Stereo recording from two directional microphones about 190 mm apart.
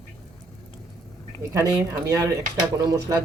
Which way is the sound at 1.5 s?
15° right (ahead or behind).